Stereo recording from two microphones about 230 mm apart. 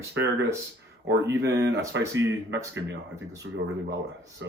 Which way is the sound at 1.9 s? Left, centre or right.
Right.